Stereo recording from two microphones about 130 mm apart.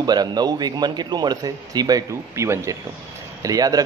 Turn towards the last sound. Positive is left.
turn(degrees=-30)  # may be behind; listen again after turning